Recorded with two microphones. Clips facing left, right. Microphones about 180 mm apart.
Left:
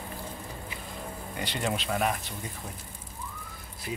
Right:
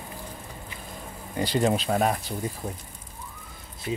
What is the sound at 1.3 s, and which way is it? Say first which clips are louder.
Speech: right 8 dB; 40° right (ahead or behind).